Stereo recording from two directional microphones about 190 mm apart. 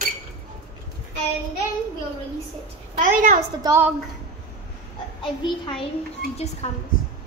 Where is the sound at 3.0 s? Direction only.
40° right (ahead or behind).